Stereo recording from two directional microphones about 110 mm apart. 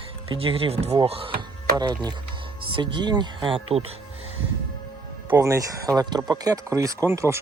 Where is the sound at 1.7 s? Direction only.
40° right (ahead or behind).